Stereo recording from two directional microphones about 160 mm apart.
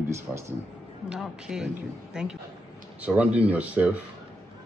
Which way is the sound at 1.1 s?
5° right (ahead or behind).